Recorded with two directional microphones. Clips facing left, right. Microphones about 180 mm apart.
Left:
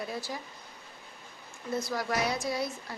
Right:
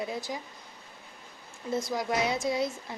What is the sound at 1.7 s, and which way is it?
Speech, 20° right (ahead or behind).